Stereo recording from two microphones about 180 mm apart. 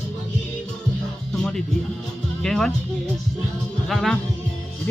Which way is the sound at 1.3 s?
5° left (ahead or behind).